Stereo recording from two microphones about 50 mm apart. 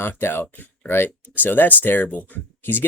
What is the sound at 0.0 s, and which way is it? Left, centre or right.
Speech, left.